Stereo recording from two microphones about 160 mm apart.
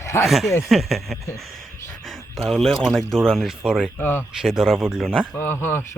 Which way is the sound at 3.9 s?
10° left (ahead or behind).